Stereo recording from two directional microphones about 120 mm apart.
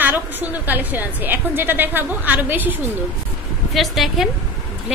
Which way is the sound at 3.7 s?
Centre (ahead or behind).